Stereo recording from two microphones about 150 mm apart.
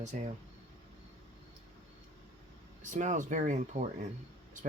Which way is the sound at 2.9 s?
55° right (ahead or behind).